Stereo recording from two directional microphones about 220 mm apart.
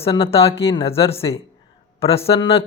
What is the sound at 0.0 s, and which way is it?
Speech, 25° left (ahead or behind).